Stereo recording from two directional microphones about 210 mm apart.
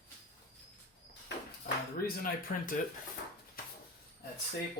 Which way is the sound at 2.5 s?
45° left (ahead or behind).